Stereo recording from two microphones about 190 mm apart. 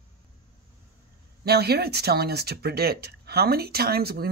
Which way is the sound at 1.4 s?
55° right (ahead or behind).